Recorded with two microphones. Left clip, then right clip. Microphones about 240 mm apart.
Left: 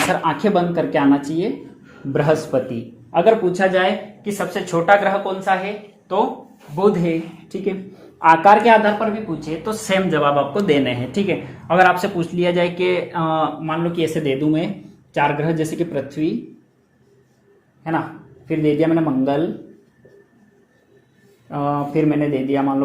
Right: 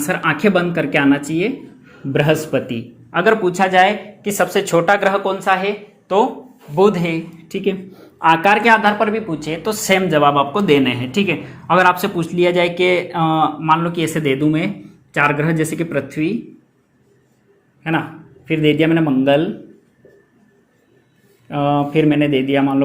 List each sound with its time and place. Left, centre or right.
0.1 s speech: right
8.2 s speech: right
18.4 s speech: right
21.5 s speech: right